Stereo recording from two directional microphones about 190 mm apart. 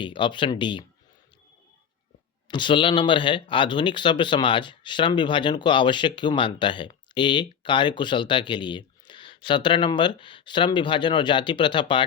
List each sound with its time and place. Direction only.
0.0 s speech: 25° left (ahead or behind)
2.5 s speech: 25° left (ahead or behind)